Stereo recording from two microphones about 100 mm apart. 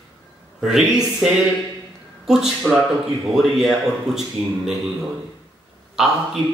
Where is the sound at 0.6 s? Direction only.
5° right (ahead or behind).